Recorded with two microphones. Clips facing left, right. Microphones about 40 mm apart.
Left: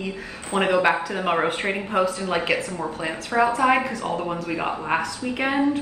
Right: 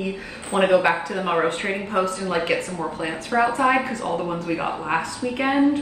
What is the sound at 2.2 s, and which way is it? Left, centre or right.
Speech, left.